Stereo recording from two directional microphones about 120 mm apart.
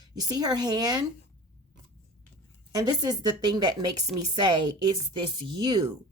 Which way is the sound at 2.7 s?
35° right (ahead or behind).